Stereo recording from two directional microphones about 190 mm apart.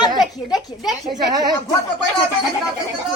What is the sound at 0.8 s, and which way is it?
Speech, centre (ahead or behind).